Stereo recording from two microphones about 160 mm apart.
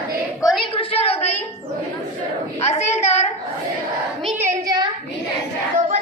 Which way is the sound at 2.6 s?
45° left (ahead or behind).